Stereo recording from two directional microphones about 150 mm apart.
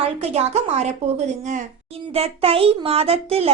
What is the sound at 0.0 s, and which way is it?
Speech, 45° right (ahead or behind).